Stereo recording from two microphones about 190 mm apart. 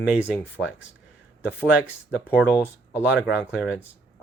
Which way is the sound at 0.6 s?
Centre (ahead or behind).